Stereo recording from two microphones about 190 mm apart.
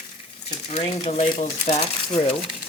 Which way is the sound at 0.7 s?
30° left (ahead or behind).